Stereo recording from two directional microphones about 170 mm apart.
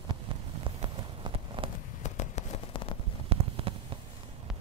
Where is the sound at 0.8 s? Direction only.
25° right (ahead or behind).